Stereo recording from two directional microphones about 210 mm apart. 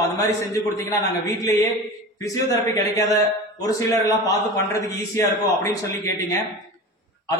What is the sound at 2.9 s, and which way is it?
A man's voice, 15° left (ahead or behind).